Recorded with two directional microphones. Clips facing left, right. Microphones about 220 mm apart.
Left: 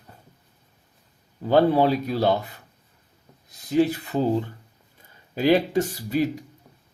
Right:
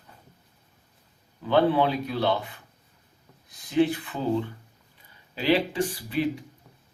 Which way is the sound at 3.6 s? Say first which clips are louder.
Left 2 dB; 40° left (ahead or behind).